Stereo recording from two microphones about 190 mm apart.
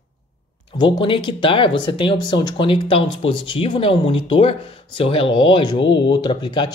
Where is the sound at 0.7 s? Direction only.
25° left (ahead or behind).